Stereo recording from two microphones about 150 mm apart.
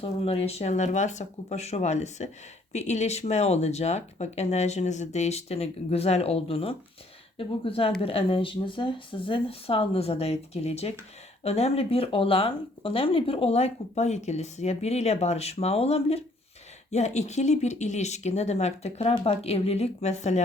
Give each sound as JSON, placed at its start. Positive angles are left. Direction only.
{"t": 0.0, "sound": "speech", "side_deg": 40}